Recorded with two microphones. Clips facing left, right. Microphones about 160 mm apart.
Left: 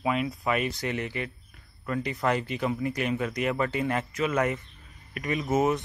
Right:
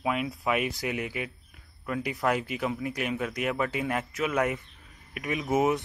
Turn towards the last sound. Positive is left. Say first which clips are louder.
# left 1 dB
turn(degrees=-5)  # may be behind; listen again after turning